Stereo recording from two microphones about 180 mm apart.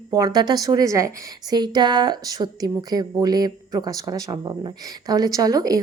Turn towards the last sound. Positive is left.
turn(degrees=-20)  # may be behind; listen again after turning